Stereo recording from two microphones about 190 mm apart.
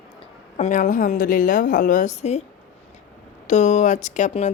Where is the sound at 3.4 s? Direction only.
40° left (ahead or behind).